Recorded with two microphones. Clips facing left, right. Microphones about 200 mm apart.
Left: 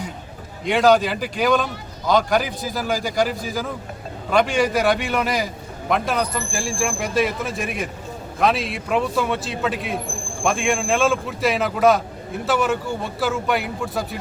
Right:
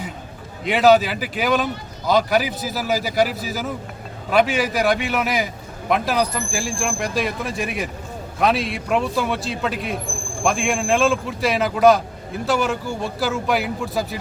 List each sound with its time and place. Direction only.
0.6 s a man's voice: 5° right (ahead or behind)